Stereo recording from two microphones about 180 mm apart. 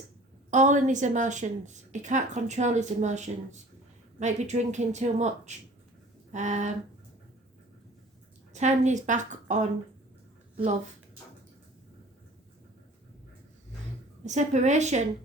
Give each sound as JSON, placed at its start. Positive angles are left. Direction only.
{"t": 0.5, "sound": "a woman's voice", "side_deg": -45}
{"t": 8.5, "sound": "speech", "side_deg": -40}
{"t": 14.3, "sound": "a woman's voice", "side_deg": -40}